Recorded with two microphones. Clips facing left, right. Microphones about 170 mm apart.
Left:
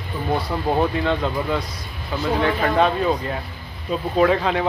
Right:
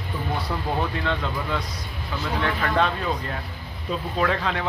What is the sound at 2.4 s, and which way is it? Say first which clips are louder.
Speech: left 4 dB; 15° left (ahead or behind).